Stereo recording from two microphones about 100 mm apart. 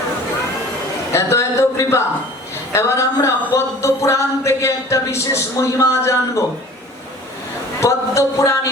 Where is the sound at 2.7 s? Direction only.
25° left (ahead or behind).